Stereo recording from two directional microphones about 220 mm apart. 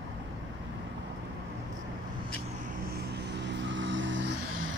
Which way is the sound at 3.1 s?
50° right (ahead or behind).